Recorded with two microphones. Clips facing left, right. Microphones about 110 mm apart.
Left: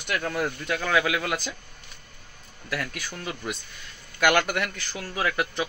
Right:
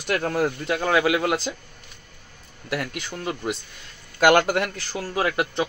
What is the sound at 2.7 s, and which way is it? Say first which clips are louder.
Speech: right 3 dB; 25° right (ahead or behind).